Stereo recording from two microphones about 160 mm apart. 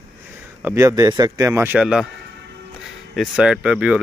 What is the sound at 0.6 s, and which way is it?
Speech, 20° right (ahead or behind).